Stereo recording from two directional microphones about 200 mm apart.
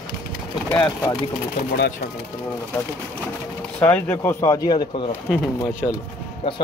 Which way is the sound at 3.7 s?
10° left (ahead or behind).